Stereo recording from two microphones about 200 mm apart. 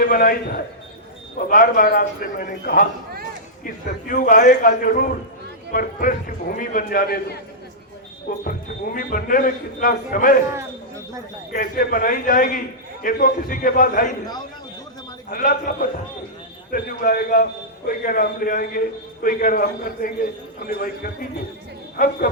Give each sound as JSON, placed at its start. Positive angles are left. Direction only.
{"t": 0.0, "sound": "a man's voice", "side_deg": 45}
{"t": 4.1, "sound": "a man's voice", "side_deg": 40}
{"t": 11.5, "sound": "a man's voice", "side_deg": 45}
{"t": 15.3, "sound": "a man's voice", "side_deg": 45}